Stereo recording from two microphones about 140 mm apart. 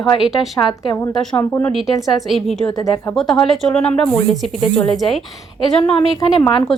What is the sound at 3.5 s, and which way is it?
Speech, 5° left (ahead or behind).